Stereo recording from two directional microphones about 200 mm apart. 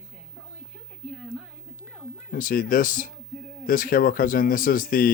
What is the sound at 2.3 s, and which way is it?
Speech, 45° left (ahead or behind).